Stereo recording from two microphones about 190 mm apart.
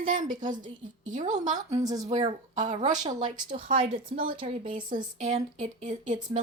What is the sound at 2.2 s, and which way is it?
A woman's voice, 40° right (ahead or behind).